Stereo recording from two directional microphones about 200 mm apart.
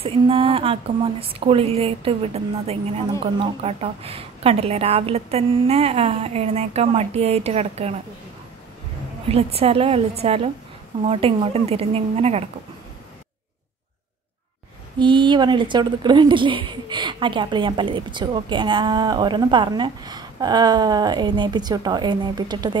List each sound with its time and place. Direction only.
0.0 s speech: 30° right (ahead or behind)
9.3 s a woman's voice: 30° right (ahead or behind)
15.0 s a woman's voice: 25° right (ahead or behind)